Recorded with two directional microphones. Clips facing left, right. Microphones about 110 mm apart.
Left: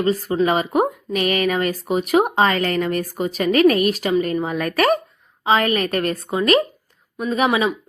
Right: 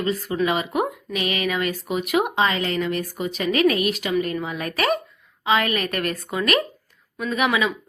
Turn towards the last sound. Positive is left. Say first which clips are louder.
# left 3 dB
turn(degrees=30)  # may be behind; listen again after turning